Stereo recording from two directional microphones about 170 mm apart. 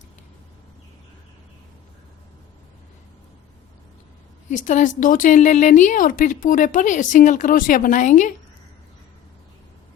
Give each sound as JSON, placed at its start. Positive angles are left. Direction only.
{"t": 4.5, "sound": "speech", "side_deg": 50}